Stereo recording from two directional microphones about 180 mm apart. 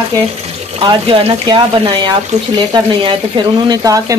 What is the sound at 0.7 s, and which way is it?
Speech, 30° right (ahead or behind).